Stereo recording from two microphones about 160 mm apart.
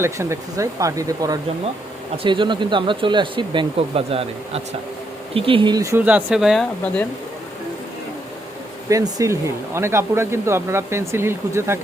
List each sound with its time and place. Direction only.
0.0 s speech: 15° right (ahead or behind)
8.9 s speech: 20° right (ahead or behind)